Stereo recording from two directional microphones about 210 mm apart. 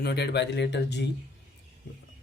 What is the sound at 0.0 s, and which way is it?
Speech, 50° left (ahead or behind).